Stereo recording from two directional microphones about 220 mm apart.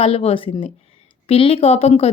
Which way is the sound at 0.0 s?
25° left (ahead or behind).